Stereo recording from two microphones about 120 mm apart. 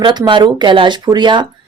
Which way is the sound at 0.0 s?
40° right (ahead or behind).